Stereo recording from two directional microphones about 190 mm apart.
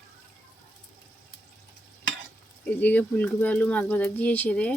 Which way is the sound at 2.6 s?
10° left (ahead or behind).